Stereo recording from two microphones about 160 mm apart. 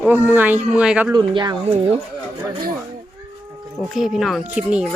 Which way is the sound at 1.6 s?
40° right (ahead or behind).